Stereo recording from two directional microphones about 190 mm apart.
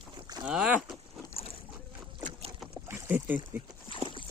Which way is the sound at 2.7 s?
10° right (ahead or behind).